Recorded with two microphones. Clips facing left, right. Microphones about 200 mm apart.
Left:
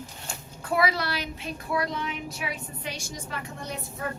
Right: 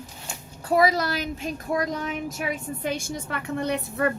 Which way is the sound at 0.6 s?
40° right (ahead or behind).